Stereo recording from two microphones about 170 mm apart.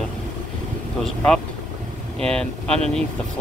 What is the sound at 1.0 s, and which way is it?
Speech, 5° left (ahead or behind).